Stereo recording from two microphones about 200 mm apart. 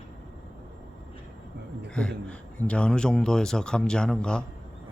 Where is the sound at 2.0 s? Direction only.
5° left (ahead or behind).